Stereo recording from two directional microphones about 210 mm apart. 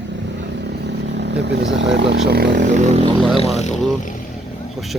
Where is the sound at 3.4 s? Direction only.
30° left (ahead or behind).